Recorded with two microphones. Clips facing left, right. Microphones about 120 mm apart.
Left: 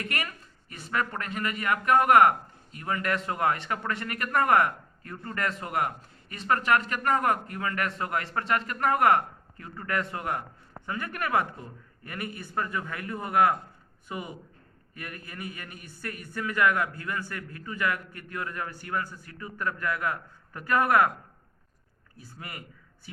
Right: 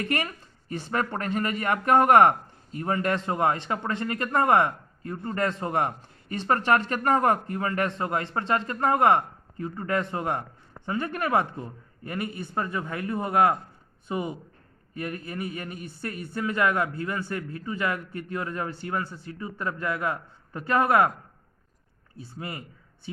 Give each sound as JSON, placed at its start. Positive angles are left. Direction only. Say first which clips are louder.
{"t": 0.0, "sound": "speech", "louder": "right 6 dB", "side_deg": -30}
{"t": 22.2, "sound": "speech", "louder": "right 6 dB", "side_deg": -25}